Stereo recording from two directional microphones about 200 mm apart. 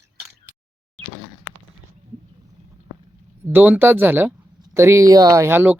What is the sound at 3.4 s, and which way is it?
Speech, 10° right (ahead or behind).